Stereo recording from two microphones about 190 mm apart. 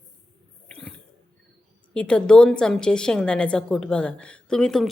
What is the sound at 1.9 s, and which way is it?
A woman's voice, 5° left (ahead or behind).